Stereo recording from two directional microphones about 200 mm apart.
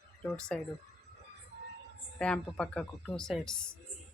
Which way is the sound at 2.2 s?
5° left (ahead or behind).